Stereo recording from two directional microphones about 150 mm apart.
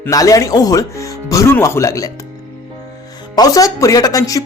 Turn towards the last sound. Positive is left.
turn(degrees=20)  # may be behind; listen again after turning